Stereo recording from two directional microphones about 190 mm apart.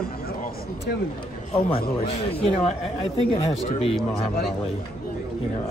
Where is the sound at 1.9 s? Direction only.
30° left (ahead or behind).